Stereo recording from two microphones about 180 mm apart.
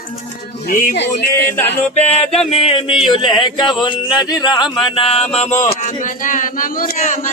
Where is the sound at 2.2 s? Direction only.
5° left (ahead or behind).